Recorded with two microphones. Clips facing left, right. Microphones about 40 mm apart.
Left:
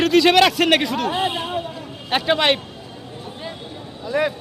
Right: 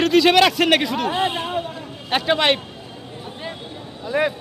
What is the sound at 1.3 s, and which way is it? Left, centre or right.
Speech, right.